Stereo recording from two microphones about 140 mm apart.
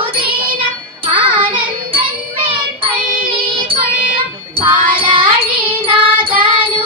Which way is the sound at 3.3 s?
40° right (ahead or behind).